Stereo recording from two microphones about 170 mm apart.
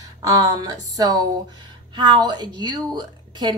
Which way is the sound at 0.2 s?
20° right (ahead or behind).